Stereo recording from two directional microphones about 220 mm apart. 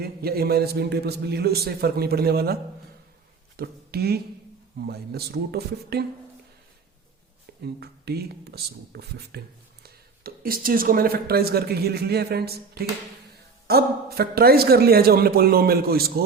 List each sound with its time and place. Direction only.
0.0 s speech: 45° right (ahead or behind)
3.6 s speech: 45° right (ahead or behind)
7.6 s speech: 45° right (ahead or behind)